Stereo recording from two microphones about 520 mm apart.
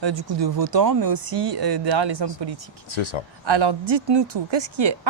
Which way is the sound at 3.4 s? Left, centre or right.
Right.